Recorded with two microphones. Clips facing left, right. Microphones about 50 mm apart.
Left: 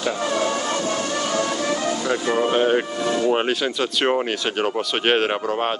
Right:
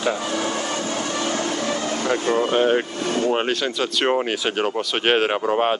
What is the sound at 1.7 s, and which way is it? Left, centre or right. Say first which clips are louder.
Music: even; right.